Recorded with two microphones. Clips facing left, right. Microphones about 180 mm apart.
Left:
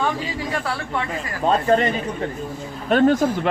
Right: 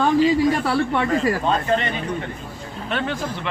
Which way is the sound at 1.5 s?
40° left (ahead or behind).